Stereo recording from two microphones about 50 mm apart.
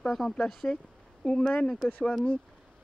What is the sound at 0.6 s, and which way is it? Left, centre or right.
Speech, left.